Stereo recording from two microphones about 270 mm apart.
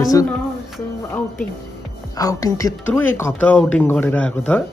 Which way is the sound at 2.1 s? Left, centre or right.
Centre.